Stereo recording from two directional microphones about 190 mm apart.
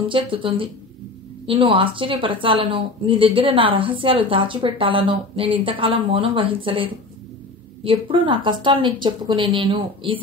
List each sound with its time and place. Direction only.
0.1 s a woman's voice: 25° right (ahead or behind)